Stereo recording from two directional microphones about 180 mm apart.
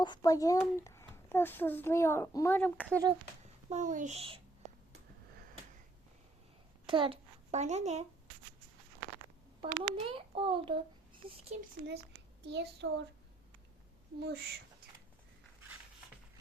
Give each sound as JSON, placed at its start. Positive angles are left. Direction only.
{"t": 0.0, "sound": "a child's voice", "side_deg": 20}
{"t": 2.9, "sound": "a child's voice", "side_deg": -20}
{"t": 3.7, "sound": "a child's voice", "side_deg": -45}
{"t": 6.8, "sound": "a child's voice", "side_deg": -30}
{"t": 7.5, "sound": "a child's voice", "side_deg": -40}
{"t": 9.6, "sound": "a child's voice", "side_deg": -30}
{"t": 12.4, "sound": "a child's voice", "side_deg": -70}
{"t": 14.2, "sound": "speech", "side_deg": -65}